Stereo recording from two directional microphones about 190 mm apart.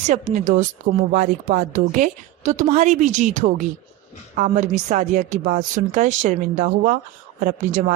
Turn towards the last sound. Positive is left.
turn(degrees=-40)  # may be behind; listen again after turning